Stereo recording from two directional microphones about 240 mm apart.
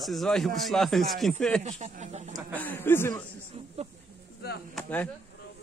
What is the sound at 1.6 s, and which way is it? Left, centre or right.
Speech, right.